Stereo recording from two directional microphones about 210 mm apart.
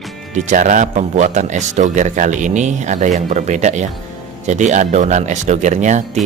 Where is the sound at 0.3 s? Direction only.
35° right (ahead or behind).